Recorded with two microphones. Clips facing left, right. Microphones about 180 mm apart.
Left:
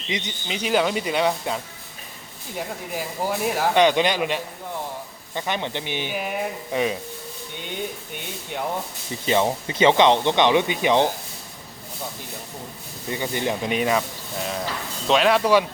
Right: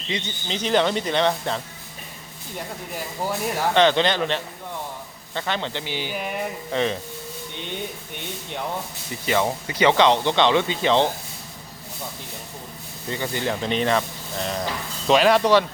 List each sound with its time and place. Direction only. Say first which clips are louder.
0.1 s speech: even; 15° left (ahead or behind)
6.1 s speech: left 1 dB; 5° left (ahead or behind)
9.2 s speech: left 2 dB; 20° left (ahead or behind)
13.1 s speech: left 1 dB; 15° left (ahead or behind)